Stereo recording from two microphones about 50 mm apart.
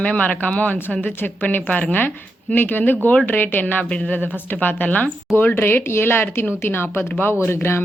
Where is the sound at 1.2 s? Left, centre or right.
Left.